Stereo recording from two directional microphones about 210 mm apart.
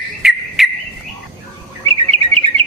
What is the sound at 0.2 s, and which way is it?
Bird, centre (ahead or behind).